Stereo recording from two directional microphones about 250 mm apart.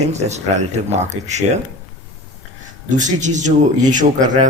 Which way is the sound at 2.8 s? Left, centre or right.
Right.